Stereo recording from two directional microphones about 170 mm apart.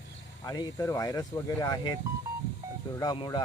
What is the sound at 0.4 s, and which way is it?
Speech, 20° left (ahead or behind).